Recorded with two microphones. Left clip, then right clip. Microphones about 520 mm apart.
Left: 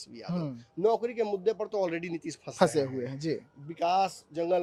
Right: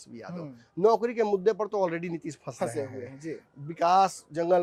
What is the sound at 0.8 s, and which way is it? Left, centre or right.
Speech, right.